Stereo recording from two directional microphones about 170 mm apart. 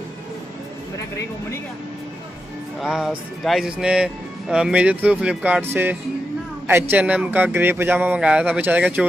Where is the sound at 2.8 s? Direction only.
5° right (ahead or behind).